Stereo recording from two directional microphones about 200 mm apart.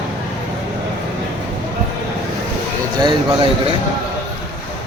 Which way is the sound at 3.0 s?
25° right (ahead or behind).